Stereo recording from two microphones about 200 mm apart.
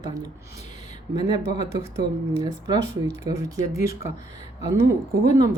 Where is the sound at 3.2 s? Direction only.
15° right (ahead or behind).